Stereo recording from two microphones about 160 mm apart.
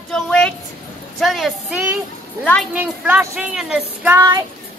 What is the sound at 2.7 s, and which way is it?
Speech, 10° right (ahead or behind).